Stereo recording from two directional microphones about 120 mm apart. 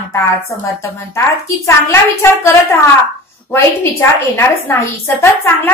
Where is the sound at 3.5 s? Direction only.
20° left (ahead or behind).